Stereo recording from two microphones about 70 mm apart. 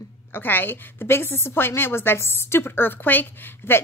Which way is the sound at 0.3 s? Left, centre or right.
Left.